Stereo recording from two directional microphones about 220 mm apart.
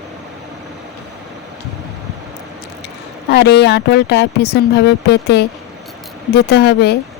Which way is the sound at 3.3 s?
50° left (ahead or behind).